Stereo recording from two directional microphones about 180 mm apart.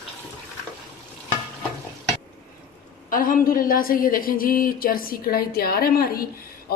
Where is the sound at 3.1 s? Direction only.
50° left (ahead or behind).